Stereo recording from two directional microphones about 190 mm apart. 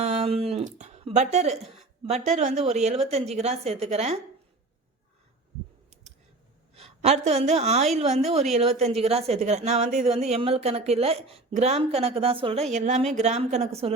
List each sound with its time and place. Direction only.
0.0 s speech: 35° right (ahead or behind)
6.7 s a woman's voice: 35° right (ahead or behind)